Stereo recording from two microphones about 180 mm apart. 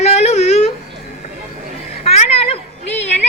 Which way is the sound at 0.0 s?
35° left (ahead or behind).